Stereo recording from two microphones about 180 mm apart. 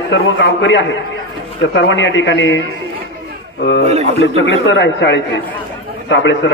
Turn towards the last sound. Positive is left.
turn(degrees=80)